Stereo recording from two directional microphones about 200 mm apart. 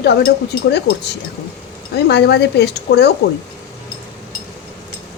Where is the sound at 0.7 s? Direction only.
55° left (ahead or behind).